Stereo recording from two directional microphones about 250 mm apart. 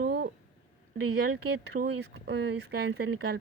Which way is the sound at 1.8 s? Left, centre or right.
Right.